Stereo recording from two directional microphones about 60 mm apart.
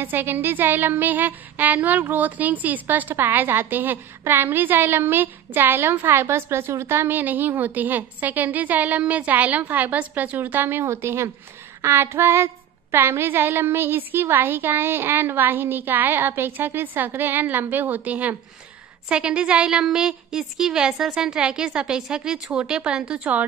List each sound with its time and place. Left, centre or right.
0.0 s speech: right
11.8 s female singing: right
12.9 s speech: right
19.0 s a woman's voice: centre